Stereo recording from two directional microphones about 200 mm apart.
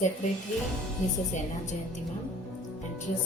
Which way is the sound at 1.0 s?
35° left (ahead or behind).